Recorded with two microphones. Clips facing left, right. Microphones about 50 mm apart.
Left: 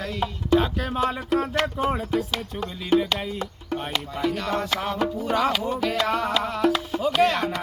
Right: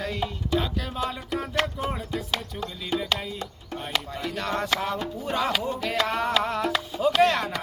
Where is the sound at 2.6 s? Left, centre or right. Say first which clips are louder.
Left 7 dB; left.